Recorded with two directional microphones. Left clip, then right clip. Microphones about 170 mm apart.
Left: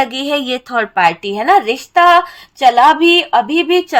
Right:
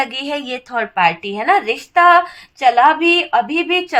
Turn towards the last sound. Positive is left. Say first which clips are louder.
# left 4 dB
turn(degrees=30)  # may be behind; listen again after turning